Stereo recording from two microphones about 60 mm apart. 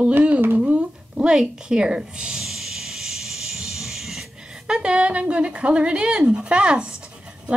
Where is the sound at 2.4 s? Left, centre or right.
Centre.